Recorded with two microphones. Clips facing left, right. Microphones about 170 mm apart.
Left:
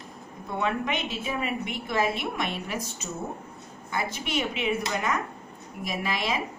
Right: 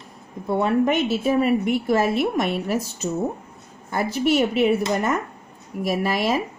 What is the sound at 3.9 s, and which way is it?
A woman's voice, 40° right (ahead or behind).